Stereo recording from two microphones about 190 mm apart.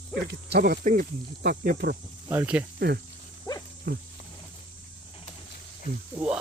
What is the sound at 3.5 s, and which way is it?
Dog, 20° left (ahead or behind).